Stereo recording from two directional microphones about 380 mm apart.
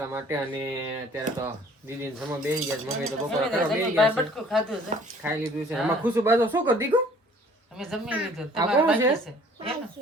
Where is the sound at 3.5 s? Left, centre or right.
Centre.